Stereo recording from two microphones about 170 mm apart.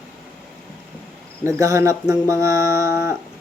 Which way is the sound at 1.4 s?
15° right (ahead or behind).